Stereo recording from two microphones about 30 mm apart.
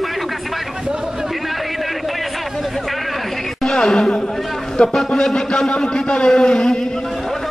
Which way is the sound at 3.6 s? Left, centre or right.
Centre.